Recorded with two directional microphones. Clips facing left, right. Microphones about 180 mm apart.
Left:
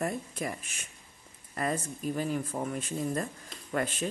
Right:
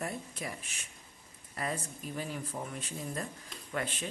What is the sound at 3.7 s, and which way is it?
Speech, 45° left (ahead or behind).